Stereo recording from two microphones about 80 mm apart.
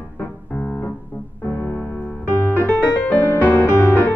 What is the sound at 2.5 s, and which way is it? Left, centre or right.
Music, centre.